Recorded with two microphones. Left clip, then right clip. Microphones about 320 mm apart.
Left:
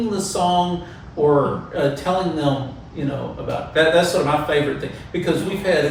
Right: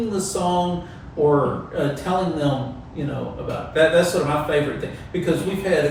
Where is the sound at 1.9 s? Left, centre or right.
Centre.